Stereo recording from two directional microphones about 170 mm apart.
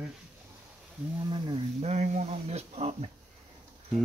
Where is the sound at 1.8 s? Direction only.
40° right (ahead or behind).